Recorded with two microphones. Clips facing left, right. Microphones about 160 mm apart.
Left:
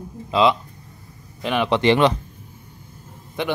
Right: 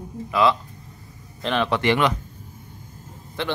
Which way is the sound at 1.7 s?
25° left (ahead or behind).